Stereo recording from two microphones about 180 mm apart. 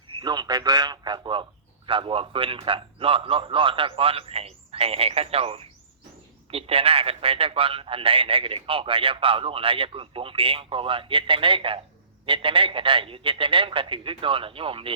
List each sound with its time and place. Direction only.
0.1 s a man's voice: 25° right (ahead or behind)